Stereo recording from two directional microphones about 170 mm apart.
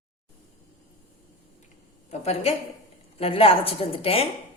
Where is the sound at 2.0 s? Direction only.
40° left (ahead or behind).